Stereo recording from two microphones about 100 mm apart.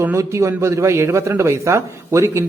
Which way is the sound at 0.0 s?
30° right (ahead or behind).